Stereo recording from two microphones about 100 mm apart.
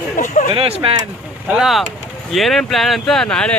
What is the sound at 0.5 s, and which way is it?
Speech, 65° right (ahead or behind).